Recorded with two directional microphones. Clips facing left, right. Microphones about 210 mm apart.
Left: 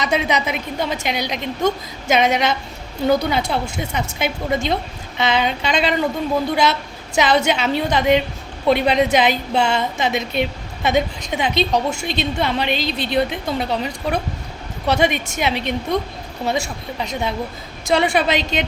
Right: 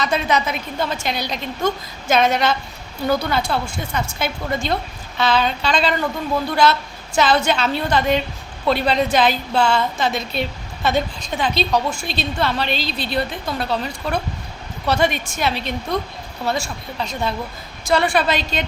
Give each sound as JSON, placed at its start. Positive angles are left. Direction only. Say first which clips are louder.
{"t": 0.0, "sound": "a woman's voice", "louder": "even", "side_deg": 20}